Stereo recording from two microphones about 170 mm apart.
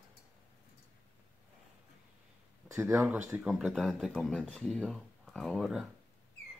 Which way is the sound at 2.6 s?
15° right (ahead or behind).